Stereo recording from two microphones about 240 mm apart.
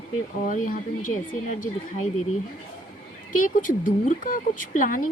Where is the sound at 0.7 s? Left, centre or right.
Left.